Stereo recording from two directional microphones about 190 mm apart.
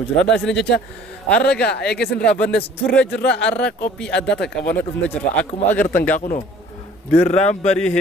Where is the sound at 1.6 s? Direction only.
60° left (ahead or behind).